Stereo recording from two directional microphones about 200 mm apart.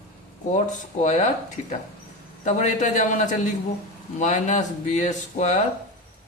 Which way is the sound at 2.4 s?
35° left (ahead or behind).